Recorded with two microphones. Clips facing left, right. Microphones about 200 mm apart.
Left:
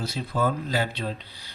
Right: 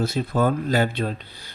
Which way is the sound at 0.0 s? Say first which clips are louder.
Right 5 dB; 50° right (ahead or behind).